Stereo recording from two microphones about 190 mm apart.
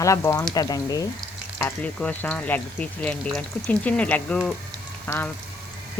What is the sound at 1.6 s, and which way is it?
Speech, 5° left (ahead or behind).